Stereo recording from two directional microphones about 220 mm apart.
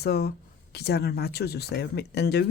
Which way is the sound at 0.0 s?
45° left (ahead or behind).